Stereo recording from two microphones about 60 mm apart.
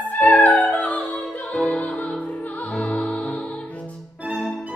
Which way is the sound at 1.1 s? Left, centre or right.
Centre.